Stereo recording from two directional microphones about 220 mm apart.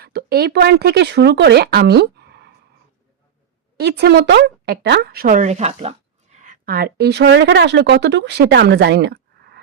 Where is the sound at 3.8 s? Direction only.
50° right (ahead or behind); by 5.9 s 30° right (ahead or behind).